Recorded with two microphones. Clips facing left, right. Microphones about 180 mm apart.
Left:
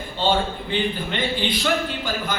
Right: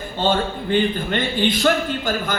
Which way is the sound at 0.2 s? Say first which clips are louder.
Right 1 dB; 50° right (ahead or behind).